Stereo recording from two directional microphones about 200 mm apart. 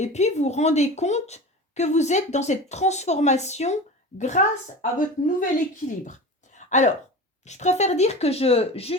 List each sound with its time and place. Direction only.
0.0 s speech: 35° left (ahead or behind)
6.1 s a sound: 40° left (ahead or behind)
7.4 s speech: 35° left (ahead or behind)